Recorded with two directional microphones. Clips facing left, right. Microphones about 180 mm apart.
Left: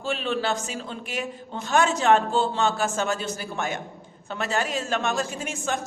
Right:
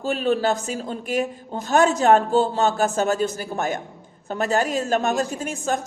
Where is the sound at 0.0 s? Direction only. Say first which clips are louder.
Right 6 dB; 40° right (ahead or behind).